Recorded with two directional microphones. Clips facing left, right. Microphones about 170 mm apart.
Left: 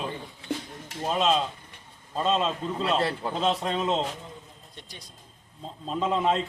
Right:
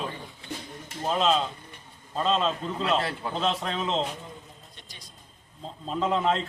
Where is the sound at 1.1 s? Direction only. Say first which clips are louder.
Even; centre (ahead or behind).